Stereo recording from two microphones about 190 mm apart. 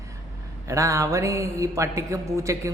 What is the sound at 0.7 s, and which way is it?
A man's voice, 15° right (ahead or behind).